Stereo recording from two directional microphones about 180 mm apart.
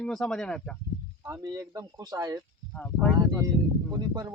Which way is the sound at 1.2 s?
20° right (ahead or behind).